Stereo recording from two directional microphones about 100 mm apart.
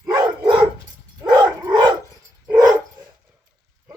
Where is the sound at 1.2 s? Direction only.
40° right (ahead or behind).